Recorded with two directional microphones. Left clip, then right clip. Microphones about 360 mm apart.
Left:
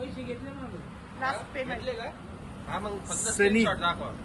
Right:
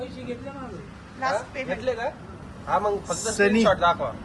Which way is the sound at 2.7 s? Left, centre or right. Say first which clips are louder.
Right 11 dB; centre.